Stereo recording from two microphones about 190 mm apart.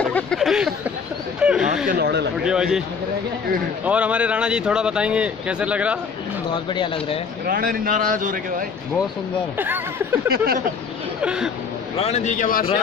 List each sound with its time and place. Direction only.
0.0 s a sound: 5° left (ahead or behind)
1.9 s a sound: 55° right (ahead or behind)
2.4 s speech: 5° right (ahead or behind)
3.8 s speech: 5° right (ahead or behind)
6.5 s speech: 25° left (ahead or behind)
7.4 s speech: 50° right (ahead or behind)
9.6 s speech: 10° right (ahead or behind)
10.3 s speech: 50° right (ahead or behind)
11.2 s speech: 5° right (ahead or behind)
12.0 s speech: 35° left (ahead or behind)